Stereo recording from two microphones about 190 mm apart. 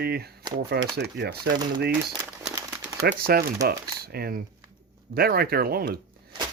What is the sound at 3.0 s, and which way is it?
Speech, 50° right (ahead or behind).